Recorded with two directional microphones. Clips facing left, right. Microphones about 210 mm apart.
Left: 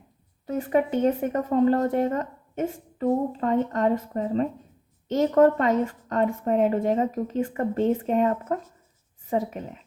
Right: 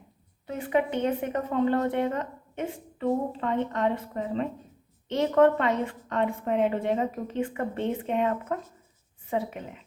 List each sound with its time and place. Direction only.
0.4 s speech: 40° left (ahead or behind)